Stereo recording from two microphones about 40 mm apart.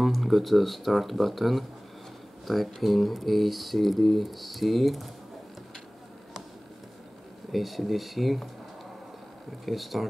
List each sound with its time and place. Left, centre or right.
0.0 s speech: centre
7.5 s speech: centre
9.7 s speech: centre